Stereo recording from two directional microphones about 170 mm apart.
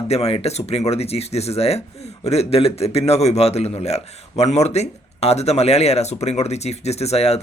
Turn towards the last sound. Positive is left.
turn(degrees=40)  # may be behind; listen again after turning